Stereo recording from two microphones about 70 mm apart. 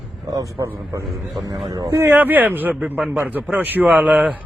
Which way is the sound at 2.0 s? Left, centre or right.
Right.